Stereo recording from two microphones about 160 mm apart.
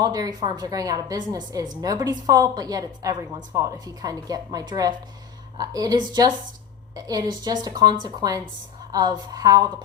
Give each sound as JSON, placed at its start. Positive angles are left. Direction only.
{"t": 0.0, "sound": "a woman's voice", "side_deg": -25}